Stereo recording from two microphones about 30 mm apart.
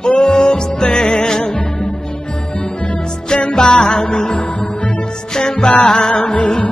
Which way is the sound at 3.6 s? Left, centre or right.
Left.